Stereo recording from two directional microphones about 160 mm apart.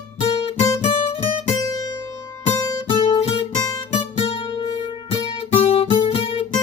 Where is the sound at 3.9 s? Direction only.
35° left (ahead or behind).